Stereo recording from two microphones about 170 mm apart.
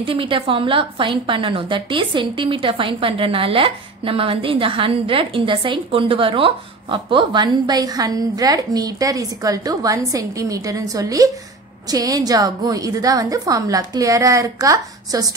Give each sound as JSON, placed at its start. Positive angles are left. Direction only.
{"t": 0.0, "sound": "a woman's voice", "side_deg": -30}